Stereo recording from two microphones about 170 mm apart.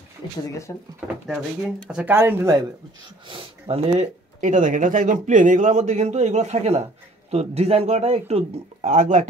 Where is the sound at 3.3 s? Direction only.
35° right (ahead or behind).